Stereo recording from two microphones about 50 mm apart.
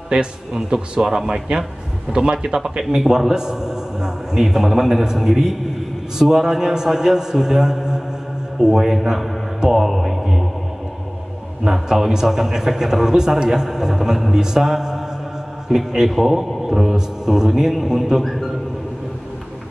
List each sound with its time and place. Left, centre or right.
0.1 s a man's voice: centre
9.6 s a sound: centre
11.6 s a man's voice: centre